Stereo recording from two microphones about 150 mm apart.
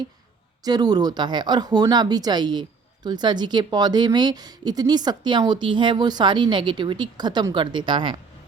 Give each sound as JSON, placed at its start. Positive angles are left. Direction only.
{"t": 0.6, "sound": "speech", "side_deg": -25}